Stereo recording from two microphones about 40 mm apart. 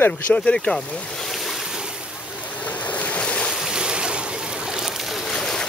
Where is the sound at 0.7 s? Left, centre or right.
Left.